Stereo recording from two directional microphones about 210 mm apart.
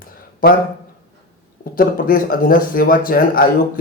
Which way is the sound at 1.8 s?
40° left (ahead or behind).